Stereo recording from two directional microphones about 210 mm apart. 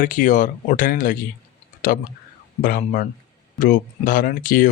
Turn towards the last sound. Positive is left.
turn(degrees=40)  # may be behind; listen again after turning